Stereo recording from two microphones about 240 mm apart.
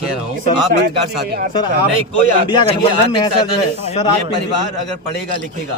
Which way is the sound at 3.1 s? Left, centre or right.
Centre.